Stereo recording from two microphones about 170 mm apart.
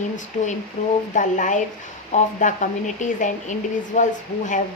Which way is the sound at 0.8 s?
45° left (ahead or behind).